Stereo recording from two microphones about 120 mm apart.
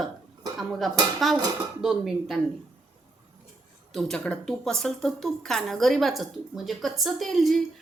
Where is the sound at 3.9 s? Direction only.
10° left (ahead or behind).